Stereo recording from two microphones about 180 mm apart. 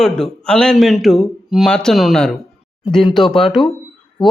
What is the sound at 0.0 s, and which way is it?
A man's voice, 5° left (ahead or behind).